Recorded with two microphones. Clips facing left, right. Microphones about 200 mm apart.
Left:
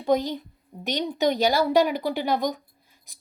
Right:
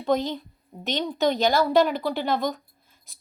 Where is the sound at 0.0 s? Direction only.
15° left (ahead or behind).